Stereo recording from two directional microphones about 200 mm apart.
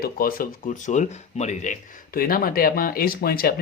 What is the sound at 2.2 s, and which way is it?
Speech, 45° left (ahead or behind).